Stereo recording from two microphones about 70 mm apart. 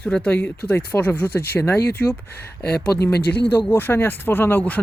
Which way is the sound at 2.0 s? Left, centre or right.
Centre.